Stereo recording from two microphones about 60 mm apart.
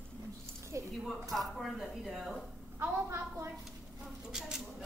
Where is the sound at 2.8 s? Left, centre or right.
Right.